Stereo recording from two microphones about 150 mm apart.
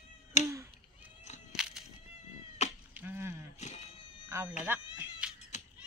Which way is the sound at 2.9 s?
15° right (ahead or behind).